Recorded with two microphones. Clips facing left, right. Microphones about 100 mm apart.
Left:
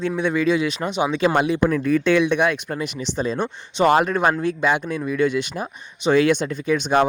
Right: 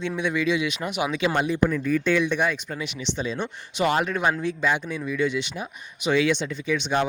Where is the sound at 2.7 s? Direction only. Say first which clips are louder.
Left 4 dB; 45° left (ahead or behind).